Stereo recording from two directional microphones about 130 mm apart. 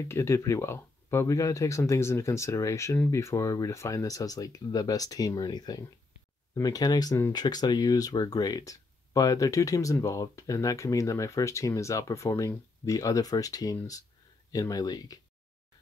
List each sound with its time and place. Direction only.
0.1 s speech: 20° left (ahead or behind)